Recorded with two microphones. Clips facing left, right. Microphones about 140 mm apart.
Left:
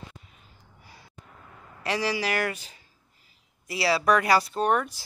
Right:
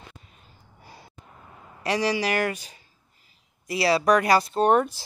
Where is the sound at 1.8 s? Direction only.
15° right (ahead or behind).